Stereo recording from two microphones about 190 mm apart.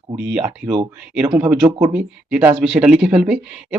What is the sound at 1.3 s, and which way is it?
Speech, 15° right (ahead or behind).